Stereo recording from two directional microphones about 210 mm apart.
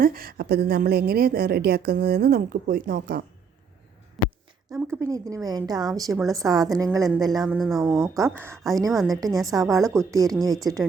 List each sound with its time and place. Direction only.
0.0 s a woman's voice: 45° right (ahead or behind)
4.2 s a sound: centre (ahead or behind)
4.9 s a woman's voice: 15° right (ahead or behind)
7.4 s speech: centre (ahead or behind)
8.0 s a woman's voice: 15° right (ahead or behind)